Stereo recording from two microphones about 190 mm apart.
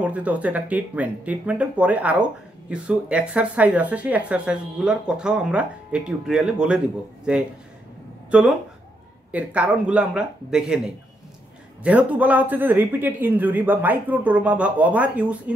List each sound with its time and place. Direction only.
0.0 s a man's voice: 5° right (ahead or behind)
9.3 s a man's voice: 5° right (ahead or behind)
11.8 s a man's voice: 5° right (ahead or behind)